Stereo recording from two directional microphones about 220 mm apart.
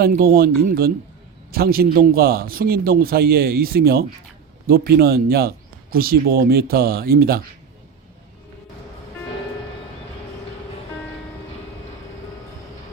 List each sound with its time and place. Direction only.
0.0 s speech: 40° right (ahead or behind)